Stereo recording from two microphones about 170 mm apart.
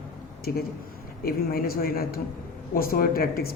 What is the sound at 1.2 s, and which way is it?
A woman's voice, 60° left (ahead or behind).